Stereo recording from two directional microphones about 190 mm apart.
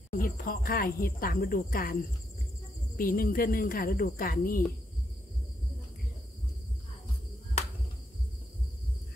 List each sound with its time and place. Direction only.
0.2 s speech: 50° left (ahead or behind)
3.0 s speech: 50° left (ahead or behind)